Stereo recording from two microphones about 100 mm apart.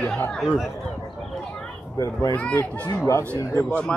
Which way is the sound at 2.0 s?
30° left (ahead or behind).